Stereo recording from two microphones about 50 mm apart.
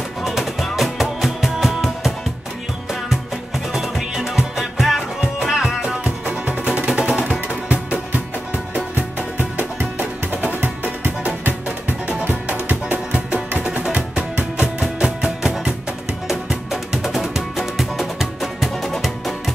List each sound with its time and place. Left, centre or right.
0.2 s music: centre
3.7 s music: centre
5.8 s music: right
8.9 s music: right
12.3 s music: right
13.7 s music: right; by 19.5 s centre